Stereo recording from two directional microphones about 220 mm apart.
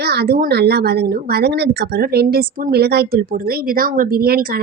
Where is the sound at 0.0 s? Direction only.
45° right (ahead or behind).